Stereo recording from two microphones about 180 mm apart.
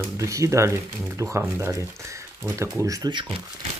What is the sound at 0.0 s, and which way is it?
Speech, 15° right (ahead or behind).